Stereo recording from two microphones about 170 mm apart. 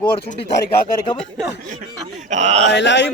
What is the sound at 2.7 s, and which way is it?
Speech, 90° left.